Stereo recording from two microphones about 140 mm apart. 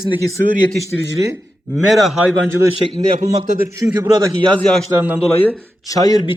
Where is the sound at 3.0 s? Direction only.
50° right (ahead or behind).